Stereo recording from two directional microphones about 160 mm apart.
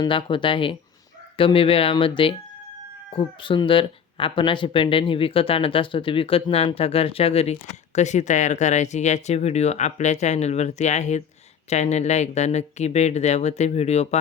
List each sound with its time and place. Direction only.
0.0 s speech: 30° left (ahead or behind)